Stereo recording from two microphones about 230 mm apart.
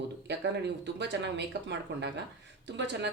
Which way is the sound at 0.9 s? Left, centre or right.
Right.